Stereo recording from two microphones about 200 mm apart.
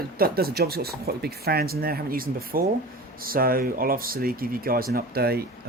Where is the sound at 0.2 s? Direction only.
50° right (ahead or behind).